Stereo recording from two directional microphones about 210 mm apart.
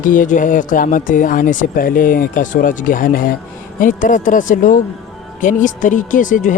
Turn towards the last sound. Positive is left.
turn(degrees=40)  # may be behind; listen again after turning